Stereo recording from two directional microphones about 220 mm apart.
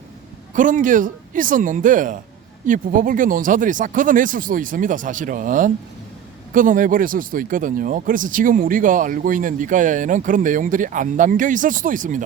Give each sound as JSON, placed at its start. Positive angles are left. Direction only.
{"t": 0.5, "sound": "speech", "side_deg": -35}